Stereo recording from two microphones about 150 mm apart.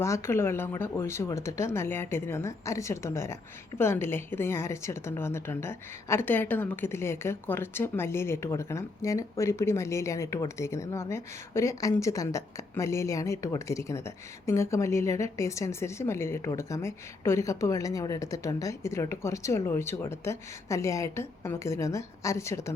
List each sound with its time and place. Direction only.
0.0 s a woman's voice: 20° left (ahead or behind)